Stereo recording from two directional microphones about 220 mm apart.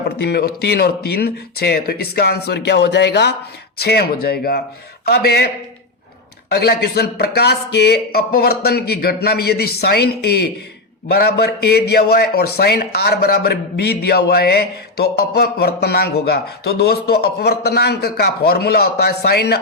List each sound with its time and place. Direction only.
0.2 s a man's voice: 45° left (ahead or behind)
6.5 s a man's voice: 45° left (ahead or behind)